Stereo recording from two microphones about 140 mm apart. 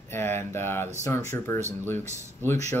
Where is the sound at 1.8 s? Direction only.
15° left (ahead or behind).